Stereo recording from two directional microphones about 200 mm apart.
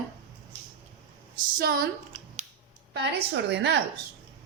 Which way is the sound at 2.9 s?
60° right (ahead or behind).